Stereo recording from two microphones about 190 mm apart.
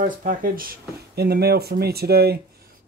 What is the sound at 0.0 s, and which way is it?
Speech, 45° right (ahead or behind).